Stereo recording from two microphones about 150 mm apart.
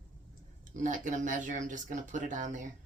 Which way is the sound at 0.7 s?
60° right (ahead or behind).